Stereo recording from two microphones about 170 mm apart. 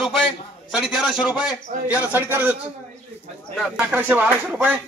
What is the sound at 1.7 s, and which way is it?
Speech, 45° right (ahead or behind).